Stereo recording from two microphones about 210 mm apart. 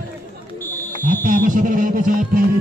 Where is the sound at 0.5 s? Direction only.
10° left (ahead or behind).